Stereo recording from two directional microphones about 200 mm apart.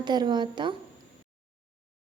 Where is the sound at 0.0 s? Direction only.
20° right (ahead or behind).